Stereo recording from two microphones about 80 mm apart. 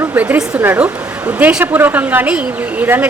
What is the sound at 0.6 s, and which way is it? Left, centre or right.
A woman's voice, right.